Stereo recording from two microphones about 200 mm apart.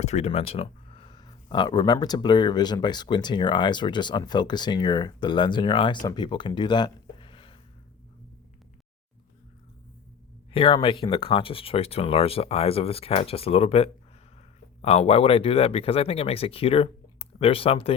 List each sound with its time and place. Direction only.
0.0 s speech: 35° left (ahead or behind)
10.5 s speech: 25° left (ahead or behind)